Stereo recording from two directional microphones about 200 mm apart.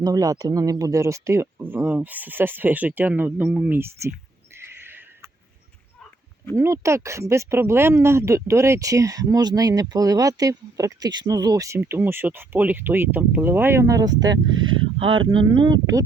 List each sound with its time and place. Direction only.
0.0 s speech: 20° right (ahead or behind)
4.5 s neigh: 10° right (ahead or behind)
6.6 s speech: 15° right (ahead or behind)